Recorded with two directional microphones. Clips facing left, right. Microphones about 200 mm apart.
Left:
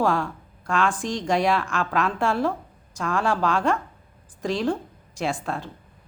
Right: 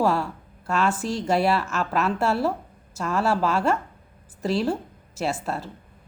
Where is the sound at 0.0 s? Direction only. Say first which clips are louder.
Even; 5° right (ahead or behind).